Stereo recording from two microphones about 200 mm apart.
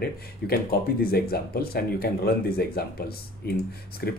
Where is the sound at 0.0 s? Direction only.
50° left (ahead or behind).